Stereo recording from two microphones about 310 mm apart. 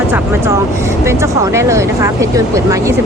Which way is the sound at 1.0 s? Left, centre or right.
Centre.